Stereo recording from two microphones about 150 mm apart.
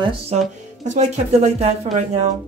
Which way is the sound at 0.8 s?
50° right (ahead or behind).